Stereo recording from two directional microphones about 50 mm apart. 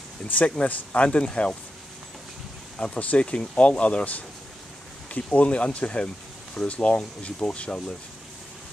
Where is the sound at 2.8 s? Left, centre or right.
Left.